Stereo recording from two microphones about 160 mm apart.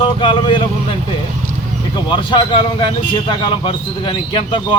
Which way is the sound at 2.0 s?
30° left (ahead or behind).